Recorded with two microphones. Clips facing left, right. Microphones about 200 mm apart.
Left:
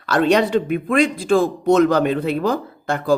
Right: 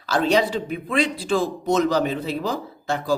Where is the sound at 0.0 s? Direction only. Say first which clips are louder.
Left 4 dB; 60° left (ahead or behind).